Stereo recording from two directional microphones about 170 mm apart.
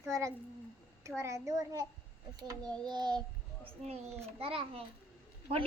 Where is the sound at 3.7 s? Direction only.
35° right (ahead or behind).